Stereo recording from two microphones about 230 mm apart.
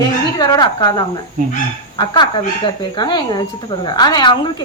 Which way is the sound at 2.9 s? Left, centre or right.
Centre.